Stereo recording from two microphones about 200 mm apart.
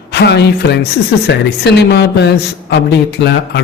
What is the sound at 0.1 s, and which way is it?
Speech, 55° left (ahead or behind).